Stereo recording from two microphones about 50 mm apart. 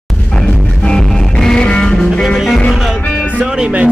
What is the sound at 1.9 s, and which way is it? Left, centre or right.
Music, centre.